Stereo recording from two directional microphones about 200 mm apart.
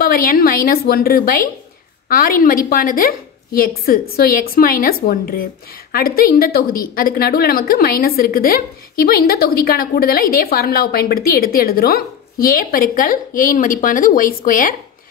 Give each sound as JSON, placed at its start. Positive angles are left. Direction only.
{"t": 0.0, "sound": "a woman's voice", "side_deg": 45}